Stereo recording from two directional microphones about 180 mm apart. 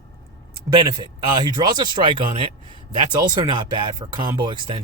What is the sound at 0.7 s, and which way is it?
Speech, 25° right (ahead or behind).